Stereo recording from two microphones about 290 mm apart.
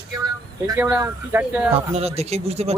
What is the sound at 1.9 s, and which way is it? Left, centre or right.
Speech, right.